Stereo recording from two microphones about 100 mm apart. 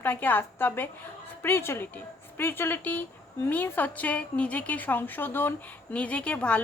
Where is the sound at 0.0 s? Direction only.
20° left (ahead or behind).